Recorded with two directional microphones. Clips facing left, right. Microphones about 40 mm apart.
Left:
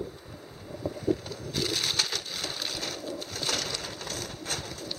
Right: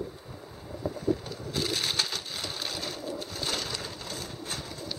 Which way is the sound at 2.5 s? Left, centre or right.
Centre.